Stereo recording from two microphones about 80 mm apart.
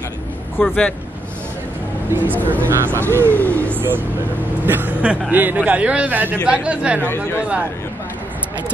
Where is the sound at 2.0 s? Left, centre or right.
Right.